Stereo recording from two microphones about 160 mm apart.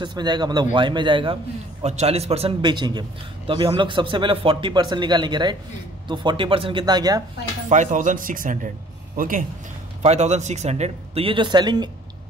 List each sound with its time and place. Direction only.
0.0 s a man's voice: 25° right (ahead or behind)
7.7 s speech: 50° right (ahead or behind)
10.0 s a man's voice: 45° right (ahead or behind); by 11.9 s 25° right (ahead or behind)